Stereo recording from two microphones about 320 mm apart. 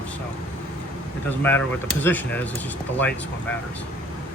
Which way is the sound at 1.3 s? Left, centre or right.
Centre.